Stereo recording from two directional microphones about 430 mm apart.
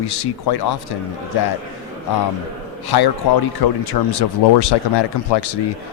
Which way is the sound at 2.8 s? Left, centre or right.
Left.